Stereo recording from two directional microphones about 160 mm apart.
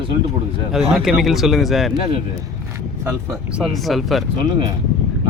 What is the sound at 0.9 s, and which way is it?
Speech, centre (ahead or behind).